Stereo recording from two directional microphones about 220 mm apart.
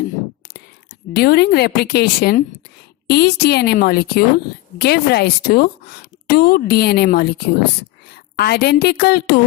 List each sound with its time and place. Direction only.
1.1 s a woman's voice: 45° left (ahead or behind)